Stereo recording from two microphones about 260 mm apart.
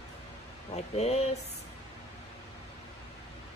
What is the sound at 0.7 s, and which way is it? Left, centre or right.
Speech, left.